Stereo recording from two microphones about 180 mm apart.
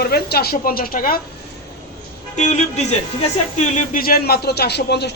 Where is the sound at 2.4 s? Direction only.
40° left (ahead or behind).